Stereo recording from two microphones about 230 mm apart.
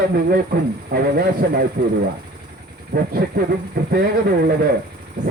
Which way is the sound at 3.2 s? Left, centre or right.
Right.